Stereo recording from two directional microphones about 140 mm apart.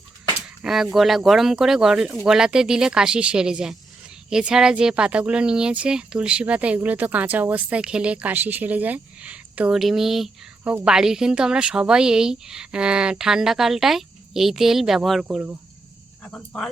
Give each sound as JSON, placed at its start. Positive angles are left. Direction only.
{"t": 0.6, "sound": "a woman's voice", "side_deg": -5}
{"t": 10.6, "sound": "a woman's voice", "side_deg": -15}
{"t": 10.8, "sound": "a woman's voice", "side_deg": -5}
{"t": 16.2, "sound": "speech", "side_deg": 5}